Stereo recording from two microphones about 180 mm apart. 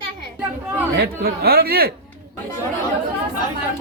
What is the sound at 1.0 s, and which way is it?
Speech, 60° right (ahead or behind).